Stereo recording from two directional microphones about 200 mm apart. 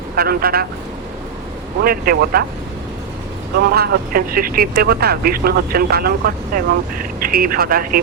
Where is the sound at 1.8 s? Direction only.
45° right (ahead or behind).